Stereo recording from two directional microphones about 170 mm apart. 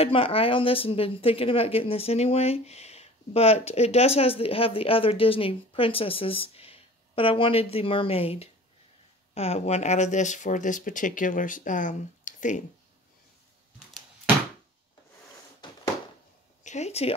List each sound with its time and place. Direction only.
0.0 s speech: 35° left (ahead or behind)
15.6 s a sound: 25° left (ahead or behind)
16.6 s speech: 40° left (ahead or behind)